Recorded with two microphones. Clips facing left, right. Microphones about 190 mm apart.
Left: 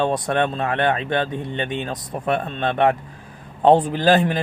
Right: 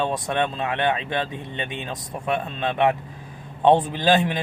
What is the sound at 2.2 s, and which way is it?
Speech, 40° left (ahead or behind).